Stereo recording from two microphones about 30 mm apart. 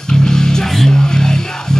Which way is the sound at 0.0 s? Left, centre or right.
Left.